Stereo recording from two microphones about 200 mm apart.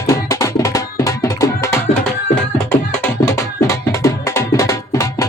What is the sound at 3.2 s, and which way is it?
Music, 15° left (ahead or behind).